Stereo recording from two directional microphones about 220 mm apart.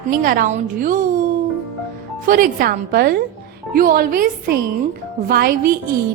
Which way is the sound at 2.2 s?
40° right (ahead or behind).